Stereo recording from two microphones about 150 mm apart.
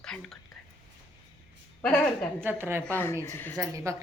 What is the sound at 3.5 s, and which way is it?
Speech, 20° right (ahead or behind).